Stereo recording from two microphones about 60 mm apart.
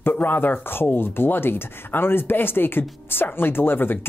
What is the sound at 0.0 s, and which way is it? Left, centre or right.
A woman's voice, left.